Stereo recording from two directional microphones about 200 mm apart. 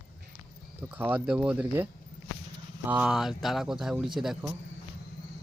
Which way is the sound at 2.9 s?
5° right (ahead or behind).